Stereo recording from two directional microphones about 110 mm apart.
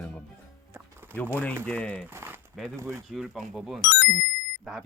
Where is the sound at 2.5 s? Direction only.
Centre (ahead or behind).